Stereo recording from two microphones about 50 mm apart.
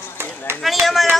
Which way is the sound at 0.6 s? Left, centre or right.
Centre.